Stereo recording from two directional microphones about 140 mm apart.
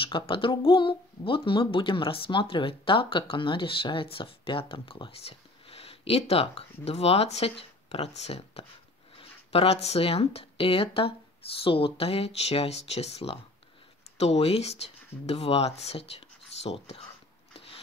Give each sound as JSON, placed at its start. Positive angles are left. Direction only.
{"t": 0.0, "sound": "speech", "side_deg": 40}